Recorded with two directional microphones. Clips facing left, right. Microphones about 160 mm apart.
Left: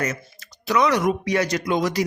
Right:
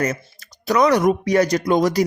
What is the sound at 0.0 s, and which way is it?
Speech, 35° right (ahead or behind).